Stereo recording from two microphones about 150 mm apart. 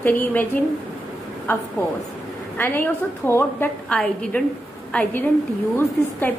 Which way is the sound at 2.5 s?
10° left (ahead or behind).